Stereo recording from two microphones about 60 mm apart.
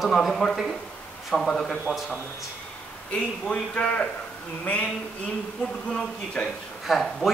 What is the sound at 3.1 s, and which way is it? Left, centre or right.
A man's voice, centre.